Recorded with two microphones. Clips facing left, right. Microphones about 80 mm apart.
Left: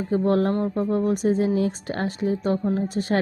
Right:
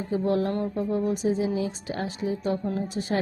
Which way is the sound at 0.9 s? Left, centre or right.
Left.